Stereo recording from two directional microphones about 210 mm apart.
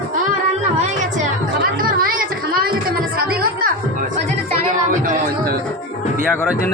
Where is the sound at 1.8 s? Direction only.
45° right (ahead or behind).